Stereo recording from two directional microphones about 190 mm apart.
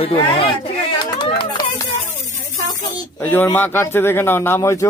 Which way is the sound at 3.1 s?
10° left (ahead or behind).